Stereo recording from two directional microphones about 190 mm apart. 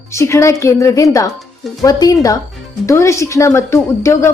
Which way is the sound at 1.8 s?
20° left (ahead or behind).